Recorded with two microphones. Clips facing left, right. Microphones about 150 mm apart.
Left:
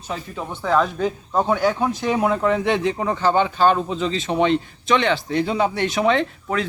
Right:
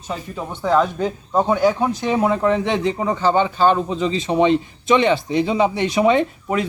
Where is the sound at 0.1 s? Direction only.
5° right (ahead or behind).